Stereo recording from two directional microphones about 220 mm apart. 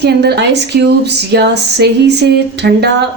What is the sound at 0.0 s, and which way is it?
Speech, 50° right (ahead or behind).